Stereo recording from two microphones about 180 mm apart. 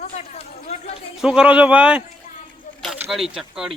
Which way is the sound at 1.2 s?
5° right (ahead or behind).